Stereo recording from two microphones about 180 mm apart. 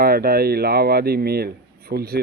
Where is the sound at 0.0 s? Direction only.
55° right (ahead or behind).